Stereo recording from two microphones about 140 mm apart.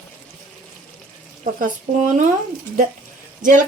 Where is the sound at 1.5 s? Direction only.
65° right (ahead or behind).